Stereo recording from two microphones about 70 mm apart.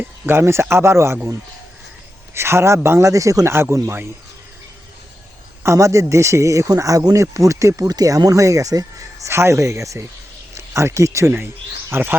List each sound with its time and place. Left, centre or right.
0.0 s speech: right
3.5 s speech: right
5.6 s a man's voice: right
9.3 s a man's voice: right
11.9 s speech: right